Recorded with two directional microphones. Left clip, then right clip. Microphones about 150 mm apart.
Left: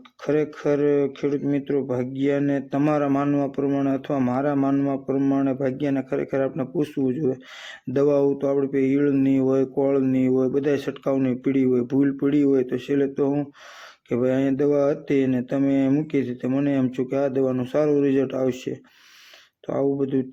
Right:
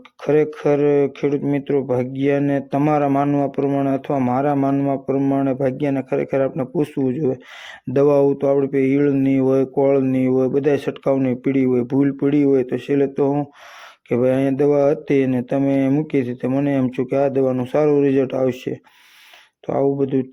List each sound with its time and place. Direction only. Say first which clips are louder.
0.3 s mantra: right 5 dB; 35° right (ahead or behind)
2.9 s speech: right 5 dB; 30° right (ahead or behind)
7.9 s mantra: right 5 dB; 35° right (ahead or behind)